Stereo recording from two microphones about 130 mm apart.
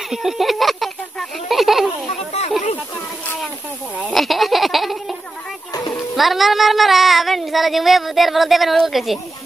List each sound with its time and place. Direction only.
0.1 s speech: 5° right (ahead or behind)
4.1 s a sound: centre (ahead or behind)
5.7 s music: 30° left (ahead or behind)
6.1 s speech: centre (ahead or behind)